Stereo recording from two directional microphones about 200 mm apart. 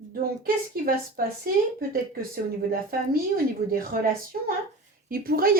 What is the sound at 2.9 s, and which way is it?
A woman's voice, 45° right (ahead or behind).